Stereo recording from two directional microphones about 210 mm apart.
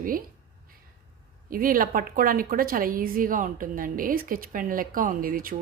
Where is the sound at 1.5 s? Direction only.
40° right (ahead or behind).